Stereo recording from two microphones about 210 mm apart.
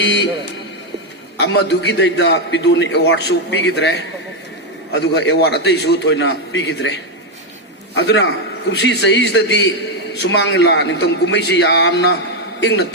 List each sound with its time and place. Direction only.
0.0 s a man's voice: 55° left (ahead or behind)
1.4 s a man's voice: 55° left (ahead or behind)